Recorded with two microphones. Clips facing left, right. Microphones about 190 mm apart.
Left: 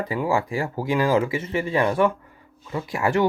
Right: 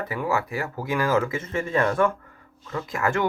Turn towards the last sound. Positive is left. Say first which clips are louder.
# left 3 dB
turn(degrees=15)  # may be behind; listen again after turning